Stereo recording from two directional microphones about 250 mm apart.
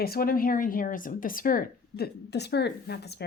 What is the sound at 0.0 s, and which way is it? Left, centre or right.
Speech, left.